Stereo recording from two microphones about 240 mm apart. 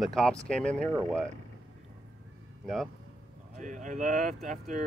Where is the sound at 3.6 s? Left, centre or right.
Right.